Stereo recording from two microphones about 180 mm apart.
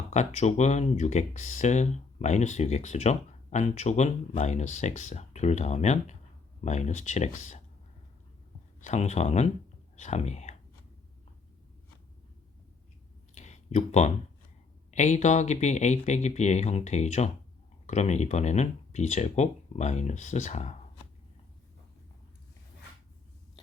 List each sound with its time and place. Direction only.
0.1 s speech: 40° left (ahead or behind)
8.8 s speech: 40° left (ahead or behind)
13.3 s a sound: 40° left (ahead or behind)
14.8 s speech: 40° left (ahead or behind)